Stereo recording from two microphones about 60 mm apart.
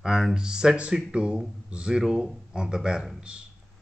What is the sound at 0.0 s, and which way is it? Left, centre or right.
A man's voice, centre.